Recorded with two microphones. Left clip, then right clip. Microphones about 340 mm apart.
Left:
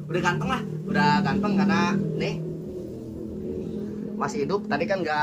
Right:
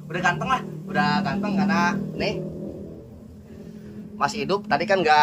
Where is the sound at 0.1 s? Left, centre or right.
Centre.